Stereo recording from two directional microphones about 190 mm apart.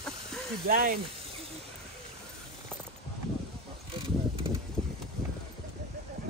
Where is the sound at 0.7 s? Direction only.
50° right (ahead or behind).